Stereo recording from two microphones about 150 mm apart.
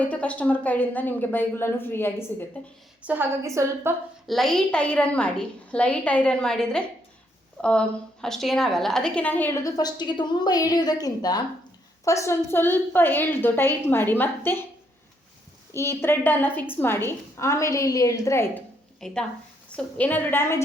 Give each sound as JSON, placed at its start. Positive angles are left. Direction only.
{"t": 0.0, "sound": "a woman's voice", "side_deg": 10}
{"t": 3.0, "sound": "a woman's voice", "side_deg": -10}
{"t": 4.3, "sound": "a woman's voice", "side_deg": 0}
{"t": 9.6, "sound": "a woman's voice", "side_deg": 25}
{"t": 15.7, "sound": "a woman's voice", "side_deg": 15}
{"t": 18.9, "sound": "a woman's voice", "side_deg": 5}